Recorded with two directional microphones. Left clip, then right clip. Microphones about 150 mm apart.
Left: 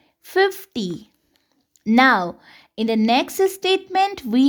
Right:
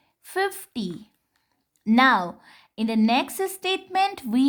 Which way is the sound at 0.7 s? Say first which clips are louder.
Left 5 dB; 35° left (ahead or behind).